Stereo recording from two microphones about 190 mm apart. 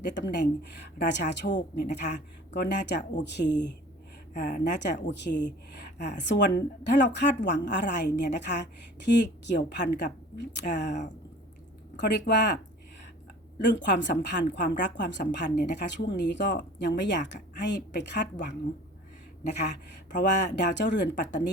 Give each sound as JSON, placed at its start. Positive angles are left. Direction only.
{"t": 0.0, "sound": "a woman's voice", "side_deg": 65}
{"t": 4.4, "sound": "speech", "side_deg": 45}
{"t": 4.8, "sound": "a woman's voice", "side_deg": 65}
{"t": 11.9, "sound": "a woman's voice", "side_deg": 65}
{"t": 13.7, "sound": "a woman's voice", "side_deg": 70}
{"t": 20.1, "sound": "a woman's voice", "side_deg": 65}